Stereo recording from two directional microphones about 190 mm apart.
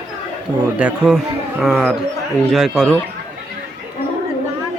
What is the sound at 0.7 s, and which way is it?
A man's voice, 5° right (ahead or behind).